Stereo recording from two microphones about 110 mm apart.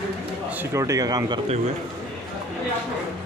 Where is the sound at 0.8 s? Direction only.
35° right (ahead or behind).